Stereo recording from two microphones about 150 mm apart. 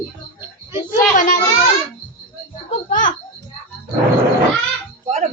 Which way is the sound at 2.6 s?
60° left (ahead or behind).